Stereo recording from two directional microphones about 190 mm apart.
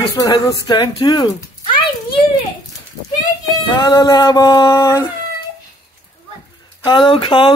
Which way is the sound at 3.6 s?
20° left (ahead or behind).